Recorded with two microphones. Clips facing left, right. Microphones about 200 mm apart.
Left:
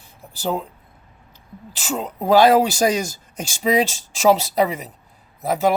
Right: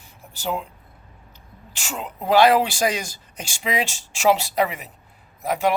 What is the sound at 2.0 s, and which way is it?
Speech, 40° left (ahead or behind).